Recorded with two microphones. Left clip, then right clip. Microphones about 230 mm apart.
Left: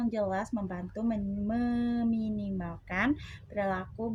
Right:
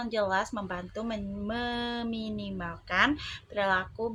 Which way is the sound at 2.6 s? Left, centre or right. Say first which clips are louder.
Right 8 dB; right.